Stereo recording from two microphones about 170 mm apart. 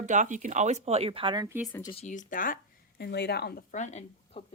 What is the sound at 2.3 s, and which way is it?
Speech, 55° left (ahead or behind).